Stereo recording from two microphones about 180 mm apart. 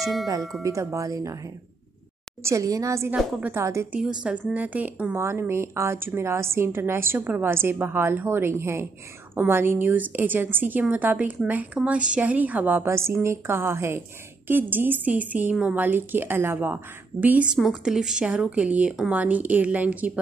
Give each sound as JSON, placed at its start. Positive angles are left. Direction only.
{"t": 0.6, "sound": "a woman's voice", "side_deg": -15}
{"t": 2.4, "sound": "a woman's voice", "side_deg": -15}